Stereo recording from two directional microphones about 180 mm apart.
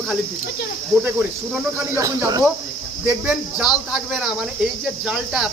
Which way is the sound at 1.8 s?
15° right (ahead or behind).